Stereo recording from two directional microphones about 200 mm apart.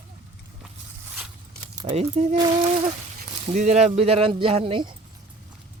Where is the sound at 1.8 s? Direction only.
25° right (ahead or behind).